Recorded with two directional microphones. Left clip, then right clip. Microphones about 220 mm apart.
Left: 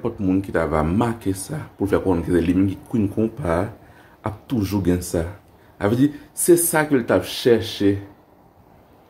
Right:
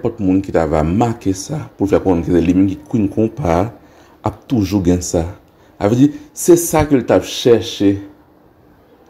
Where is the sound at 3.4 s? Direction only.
20° right (ahead or behind).